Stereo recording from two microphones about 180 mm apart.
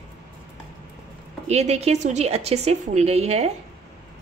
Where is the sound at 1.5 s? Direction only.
35° right (ahead or behind).